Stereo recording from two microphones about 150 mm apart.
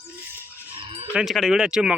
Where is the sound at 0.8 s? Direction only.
35° right (ahead or behind).